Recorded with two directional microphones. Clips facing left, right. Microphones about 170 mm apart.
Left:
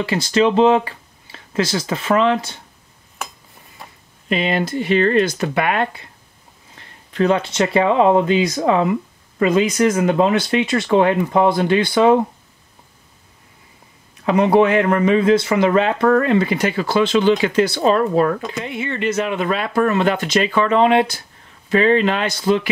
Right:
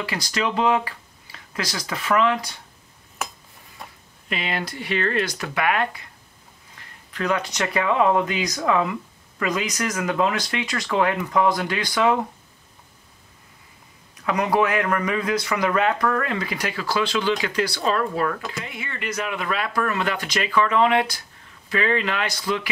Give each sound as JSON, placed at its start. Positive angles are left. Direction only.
{"t": 0.0, "sound": "speech", "side_deg": 25}
{"t": 3.8, "sound": "a sound", "side_deg": 0}
{"t": 4.3, "sound": "speech", "side_deg": 25}
{"t": 7.1, "sound": "speech", "side_deg": 25}
{"t": 14.2, "sound": "speech", "side_deg": 25}